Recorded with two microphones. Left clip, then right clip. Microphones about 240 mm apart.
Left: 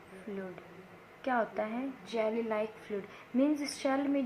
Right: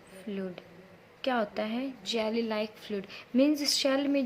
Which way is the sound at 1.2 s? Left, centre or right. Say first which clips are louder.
Right 2 dB; right.